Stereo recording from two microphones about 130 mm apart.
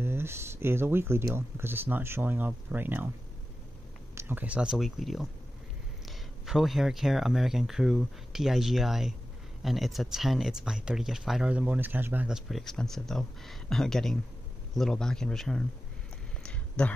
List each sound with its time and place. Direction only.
0.0 s speech: 20° right (ahead or behind)
4.1 s speech: 20° right (ahead or behind); by 15.6 s 5° left (ahead or behind)
16.4 s a sound: 10° left (ahead or behind)